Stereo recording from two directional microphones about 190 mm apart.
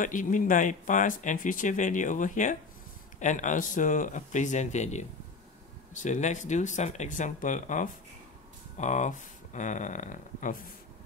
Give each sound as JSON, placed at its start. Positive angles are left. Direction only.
{"t": 0.0, "sound": "speech", "side_deg": 45}